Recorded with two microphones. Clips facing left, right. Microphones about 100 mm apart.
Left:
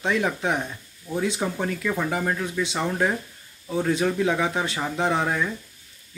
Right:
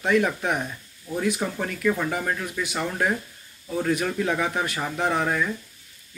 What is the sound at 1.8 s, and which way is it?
Speech, 5° left (ahead or behind).